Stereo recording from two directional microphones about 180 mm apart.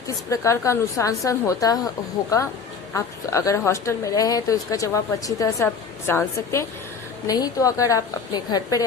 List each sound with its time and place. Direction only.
0.3 s a woman's voice: 15° left (ahead or behind)
2.9 s a woman's voice: 15° left (ahead or behind)